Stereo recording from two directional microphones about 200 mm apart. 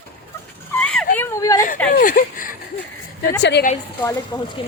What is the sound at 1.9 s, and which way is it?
Speech, 45° left (ahead or behind).